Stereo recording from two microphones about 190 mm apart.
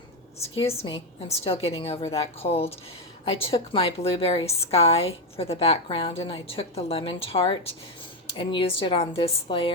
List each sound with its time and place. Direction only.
0.6 s a woman's voice: 30° left (ahead or behind)